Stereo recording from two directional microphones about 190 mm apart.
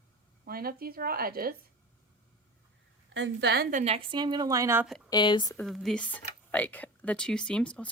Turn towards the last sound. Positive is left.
turn(degrees=5)  # may be behind; listen again after turning